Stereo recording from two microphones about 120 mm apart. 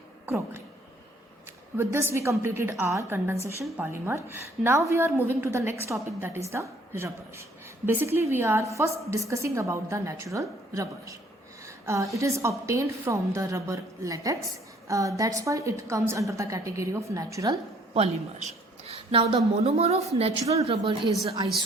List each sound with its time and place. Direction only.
0.3 s a woman's voice: 20° right (ahead or behind)
1.7 s a woman's voice: 20° right (ahead or behind)
17.9 s a woman's voice: 60° right (ahead or behind)